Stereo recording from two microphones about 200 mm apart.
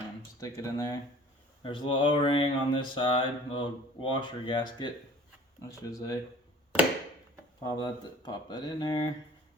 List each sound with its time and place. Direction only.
0.3 s speech: 15° left (ahead or behind)
7.6 s speech: 20° left (ahead or behind)